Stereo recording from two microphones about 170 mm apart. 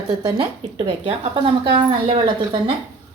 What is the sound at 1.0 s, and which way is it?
Speech, 30° right (ahead or behind).